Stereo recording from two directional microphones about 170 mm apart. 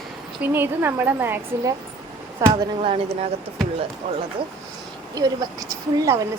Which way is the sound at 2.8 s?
35° right (ahead or behind).